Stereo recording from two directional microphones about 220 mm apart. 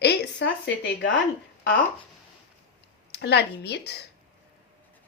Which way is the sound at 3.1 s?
50° left (ahead or behind).